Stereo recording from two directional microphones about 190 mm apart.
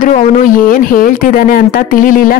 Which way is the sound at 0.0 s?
45° left (ahead or behind).